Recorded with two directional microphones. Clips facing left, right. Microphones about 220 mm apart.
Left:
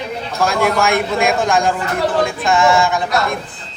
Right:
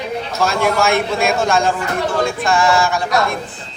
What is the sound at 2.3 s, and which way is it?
Music, 20° left (ahead or behind).